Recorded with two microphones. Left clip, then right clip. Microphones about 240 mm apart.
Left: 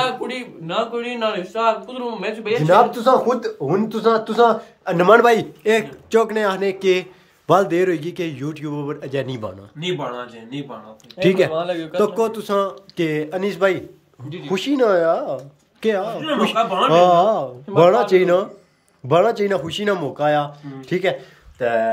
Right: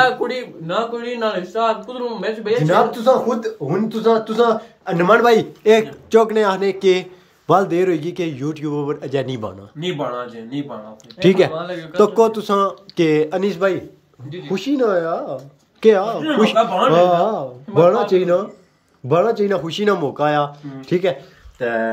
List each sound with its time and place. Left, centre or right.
0.7 s a man's voice: centre
2.6 s speech: centre
4.9 s a man's voice: left
5.2 s a man's voice: centre
11.5 s a man's voice: left
12.0 s a man's voice: centre